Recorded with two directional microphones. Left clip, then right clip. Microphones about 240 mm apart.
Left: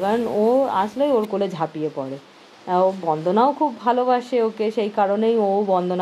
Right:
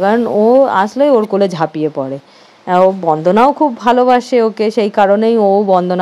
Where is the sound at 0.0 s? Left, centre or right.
Right.